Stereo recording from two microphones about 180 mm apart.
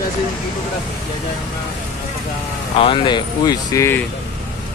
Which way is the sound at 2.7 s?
30° left (ahead or behind).